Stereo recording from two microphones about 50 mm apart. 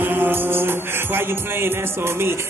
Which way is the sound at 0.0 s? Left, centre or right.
Right.